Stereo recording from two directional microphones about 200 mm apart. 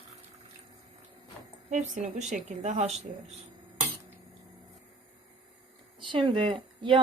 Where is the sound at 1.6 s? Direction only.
40° right (ahead or behind).